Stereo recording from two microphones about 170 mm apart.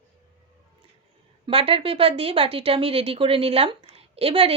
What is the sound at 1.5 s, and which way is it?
Speech, 35° right (ahead or behind).